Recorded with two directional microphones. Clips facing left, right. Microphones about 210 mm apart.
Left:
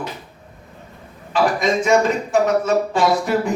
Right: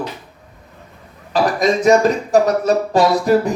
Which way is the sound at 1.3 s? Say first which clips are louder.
Right 2 dB; 40° right (ahead or behind).